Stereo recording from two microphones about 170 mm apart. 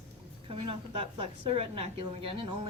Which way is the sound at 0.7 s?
35° right (ahead or behind).